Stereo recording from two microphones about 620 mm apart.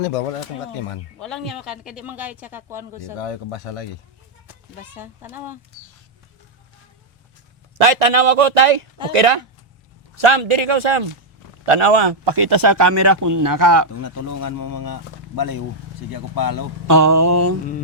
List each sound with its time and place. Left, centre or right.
0.0 s speech: left
1.2 s speech: centre
3.2 s speech: left
4.9 s speech: centre
7.8 s a man's voice: right
14.0 s speech: left
16.8 s mantra: right